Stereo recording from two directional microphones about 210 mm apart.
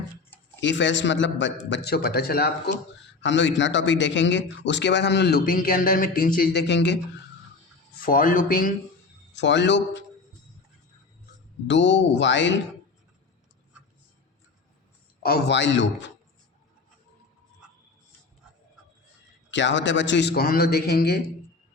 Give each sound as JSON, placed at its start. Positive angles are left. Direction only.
{"t": 0.6, "sound": "a man's voice", "side_deg": 60}
{"t": 3.2, "sound": "a man's voice", "side_deg": 60}
{"t": 8.0, "sound": "speech", "side_deg": 40}
{"t": 9.3, "sound": "a man's voice", "side_deg": 55}
{"t": 11.7, "sound": "a man's voice", "side_deg": 60}
{"t": 15.2, "sound": "a man's voice", "side_deg": 50}
{"t": 19.5, "sound": "a man's voice", "side_deg": 60}